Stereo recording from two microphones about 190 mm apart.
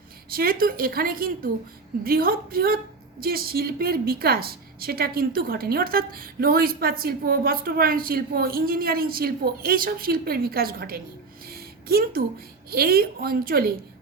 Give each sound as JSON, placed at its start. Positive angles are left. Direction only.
{"t": 0.3, "sound": "a woman's voice", "side_deg": -50}
{"t": 11.4, "sound": "a sound", "side_deg": -50}
{"t": 12.7, "sound": "a woman's voice", "side_deg": -50}